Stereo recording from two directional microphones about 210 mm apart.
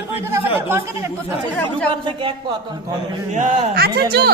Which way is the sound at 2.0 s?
25° right (ahead or behind).